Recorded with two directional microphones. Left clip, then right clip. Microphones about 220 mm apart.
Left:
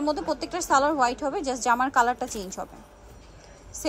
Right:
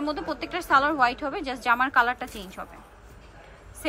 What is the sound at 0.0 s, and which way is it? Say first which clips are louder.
A woman's voice: left 3 dB; 15° left (ahead or behind).